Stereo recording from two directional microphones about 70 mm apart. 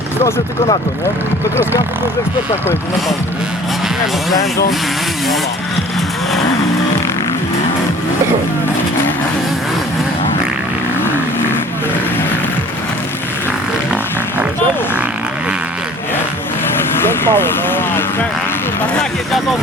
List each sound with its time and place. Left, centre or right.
17.0 s speech: left